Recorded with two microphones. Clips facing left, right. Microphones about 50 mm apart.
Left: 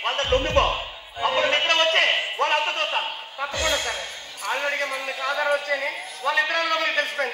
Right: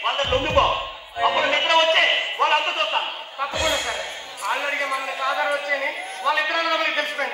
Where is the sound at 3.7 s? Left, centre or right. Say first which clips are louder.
Right 1 dB; right.